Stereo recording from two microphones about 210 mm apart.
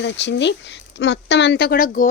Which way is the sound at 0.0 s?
55° left (ahead or behind).